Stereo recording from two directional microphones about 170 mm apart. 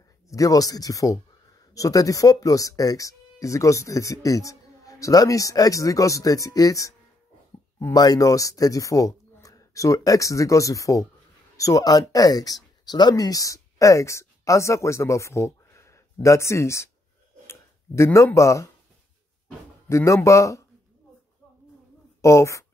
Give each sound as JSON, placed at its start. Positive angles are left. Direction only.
{"t": 0.3, "sound": "speech", "side_deg": 20}
{"t": 19.9, "sound": "speech", "side_deg": 15}
{"t": 22.2, "sound": "speech", "side_deg": 15}